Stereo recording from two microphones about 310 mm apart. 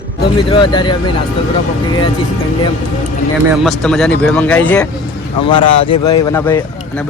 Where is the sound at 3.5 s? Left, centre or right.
Centre.